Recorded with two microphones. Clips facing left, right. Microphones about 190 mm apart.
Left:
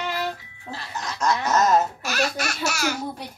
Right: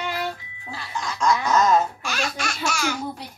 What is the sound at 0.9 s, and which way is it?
Baby laughter, 40° left (ahead or behind).